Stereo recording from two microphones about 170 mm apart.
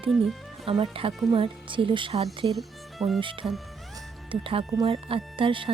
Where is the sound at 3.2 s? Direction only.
30° right (ahead or behind).